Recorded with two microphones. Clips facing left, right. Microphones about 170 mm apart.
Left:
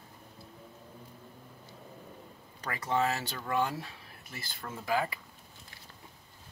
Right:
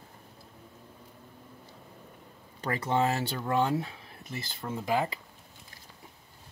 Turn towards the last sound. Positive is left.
turn(degrees=-20)  # may be behind; listen again after turning